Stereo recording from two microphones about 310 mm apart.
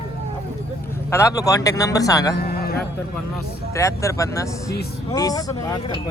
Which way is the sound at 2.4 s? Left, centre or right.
Left.